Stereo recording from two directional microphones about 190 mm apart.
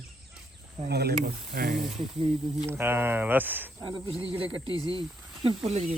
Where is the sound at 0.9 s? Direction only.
55° right (ahead or behind).